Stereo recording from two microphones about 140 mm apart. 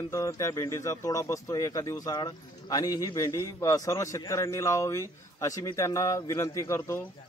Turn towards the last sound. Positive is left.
turn(degrees=20)  # may be behind; listen again after turning